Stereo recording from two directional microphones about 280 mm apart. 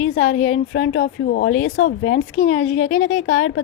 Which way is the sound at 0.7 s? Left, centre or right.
Left.